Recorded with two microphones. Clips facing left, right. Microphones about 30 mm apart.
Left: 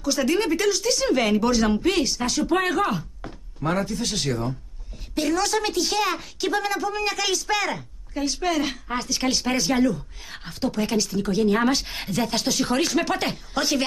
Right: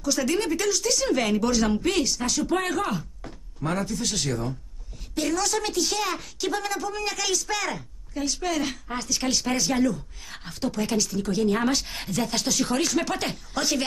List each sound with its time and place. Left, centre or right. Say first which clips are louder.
0.0 s a woman's voice: left 3 dB; centre